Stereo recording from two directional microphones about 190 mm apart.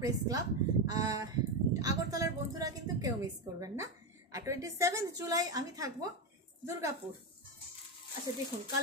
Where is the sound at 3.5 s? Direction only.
15° right (ahead or behind).